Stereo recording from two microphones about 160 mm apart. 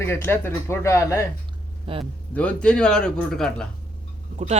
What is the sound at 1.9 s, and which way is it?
Speech, 35° right (ahead or behind).